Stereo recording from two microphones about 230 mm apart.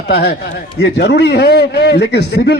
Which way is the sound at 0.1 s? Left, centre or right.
Left.